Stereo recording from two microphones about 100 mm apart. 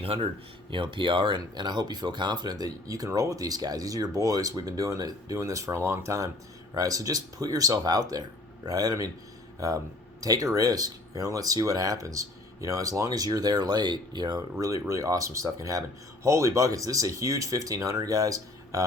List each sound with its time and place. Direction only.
0.0 s speech: 70° right (ahead or behind)
0.7 s speech: 55° right (ahead or behind)
14.6 s speech: 30° right (ahead or behind)